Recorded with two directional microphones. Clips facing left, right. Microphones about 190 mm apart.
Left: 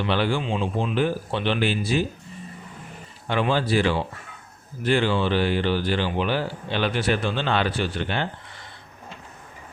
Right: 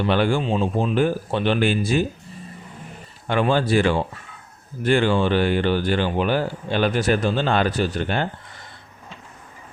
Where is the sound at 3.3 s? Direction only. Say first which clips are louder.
Right 3 dB; 50° right (ahead or behind).